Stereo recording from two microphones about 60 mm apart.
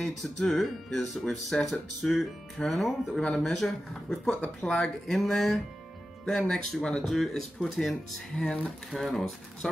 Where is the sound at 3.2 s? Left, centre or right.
Centre.